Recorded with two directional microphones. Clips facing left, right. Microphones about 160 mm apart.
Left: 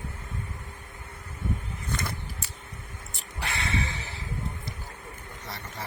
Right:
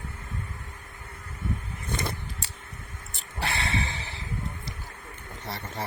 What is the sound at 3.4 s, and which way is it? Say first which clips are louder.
Snort: right 1 dB; 30° right (ahead or behind).